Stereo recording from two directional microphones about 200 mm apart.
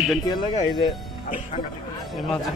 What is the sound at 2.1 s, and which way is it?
Speech, centre (ahead or behind).